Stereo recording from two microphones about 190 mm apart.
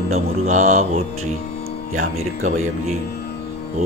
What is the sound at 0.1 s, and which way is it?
Mantra, 40° right (ahead or behind).